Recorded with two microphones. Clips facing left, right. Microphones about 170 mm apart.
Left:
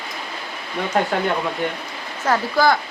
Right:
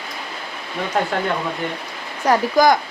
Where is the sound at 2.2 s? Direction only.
15° right (ahead or behind).